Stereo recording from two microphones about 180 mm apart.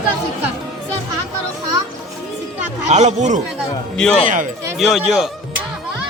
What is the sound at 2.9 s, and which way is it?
Speech, 40° right (ahead or behind).